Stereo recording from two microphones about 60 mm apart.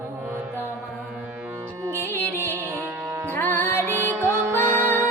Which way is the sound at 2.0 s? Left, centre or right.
Left.